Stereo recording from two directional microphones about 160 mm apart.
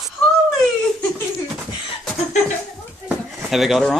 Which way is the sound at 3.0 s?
Centre (ahead or behind).